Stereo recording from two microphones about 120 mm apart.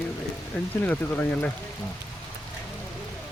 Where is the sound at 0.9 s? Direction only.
15° left (ahead or behind).